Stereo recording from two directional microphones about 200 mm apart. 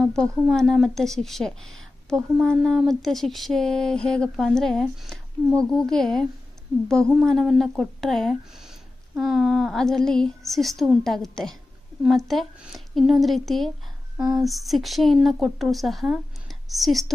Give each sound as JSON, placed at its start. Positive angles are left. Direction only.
{"t": 0.0, "sound": "a woman's voice", "side_deg": 0}
{"t": 14.2, "sound": "speech", "side_deg": -20}
{"t": 14.4, "sound": "a woman's voice", "side_deg": 0}